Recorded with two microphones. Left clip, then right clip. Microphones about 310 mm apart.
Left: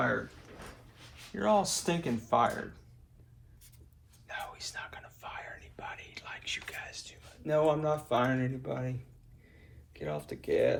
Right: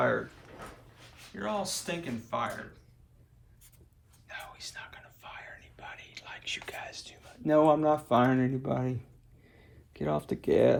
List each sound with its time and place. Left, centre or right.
1.4 s speech: centre
4.3 s whispering: centre
6.7 s speech: centre